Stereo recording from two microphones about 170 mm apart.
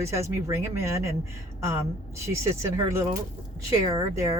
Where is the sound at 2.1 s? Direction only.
15° right (ahead or behind).